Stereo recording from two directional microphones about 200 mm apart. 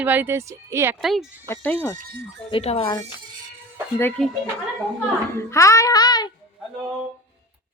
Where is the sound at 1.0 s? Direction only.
Centre (ahead or behind).